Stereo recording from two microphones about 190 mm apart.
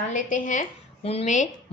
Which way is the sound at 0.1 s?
45° left (ahead or behind).